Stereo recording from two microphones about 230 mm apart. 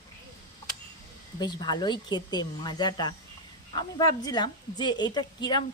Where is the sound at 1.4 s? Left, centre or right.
Centre.